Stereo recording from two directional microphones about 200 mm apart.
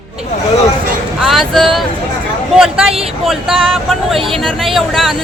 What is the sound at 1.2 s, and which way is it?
Speech, centre (ahead or behind).